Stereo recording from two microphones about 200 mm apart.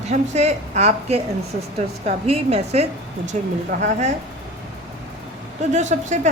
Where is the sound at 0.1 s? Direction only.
35° right (ahead or behind).